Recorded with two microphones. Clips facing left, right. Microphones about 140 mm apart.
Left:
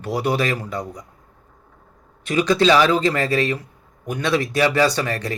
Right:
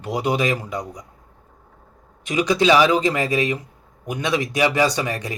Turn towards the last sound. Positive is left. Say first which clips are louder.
# left 1 dB
turn(degrees=-15)  # may be behind; listen again after turning